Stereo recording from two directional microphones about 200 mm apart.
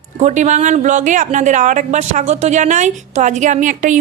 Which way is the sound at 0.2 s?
35° right (ahead or behind).